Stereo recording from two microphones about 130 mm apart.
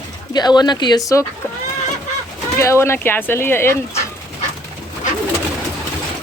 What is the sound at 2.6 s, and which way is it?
Speech, 20° left (ahead or behind).